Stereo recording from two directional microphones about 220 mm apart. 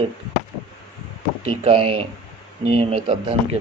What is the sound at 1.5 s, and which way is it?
Speech, 25° right (ahead or behind).